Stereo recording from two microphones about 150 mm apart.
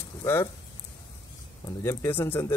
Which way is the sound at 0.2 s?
15° left (ahead or behind).